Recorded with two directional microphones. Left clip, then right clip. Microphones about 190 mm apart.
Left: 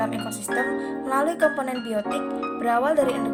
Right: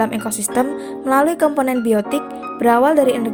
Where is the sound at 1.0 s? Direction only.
40° right (ahead or behind).